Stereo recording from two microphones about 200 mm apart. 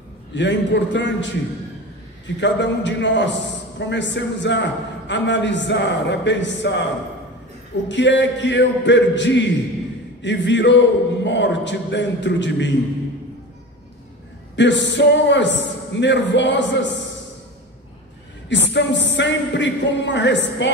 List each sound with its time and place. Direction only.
0.3 s a man's voice: 65° left (ahead or behind)
7.9 s a man's voice: 65° left (ahead or behind)
14.5 s a man's voice: 65° left (ahead or behind)
18.5 s a man's voice: 65° left (ahead or behind)